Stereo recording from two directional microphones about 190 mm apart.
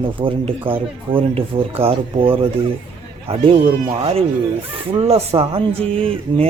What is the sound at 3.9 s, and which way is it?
Speech, 30° right (ahead or behind).